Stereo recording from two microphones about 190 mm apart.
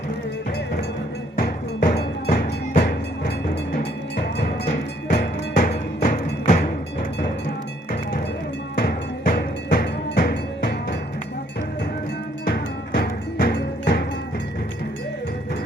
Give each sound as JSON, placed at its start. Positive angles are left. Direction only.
{"t": 1.4, "sound": "music", "side_deg": 45}
{"t": 5.0, "sound": "music", "side_deg": 50}
{"t": 8.7, "sound": "music", "side_deg": 50}
{"t": 12.5, "sound": "music", "side_deg": 50}